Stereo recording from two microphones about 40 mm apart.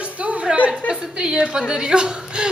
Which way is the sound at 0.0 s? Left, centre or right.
Right.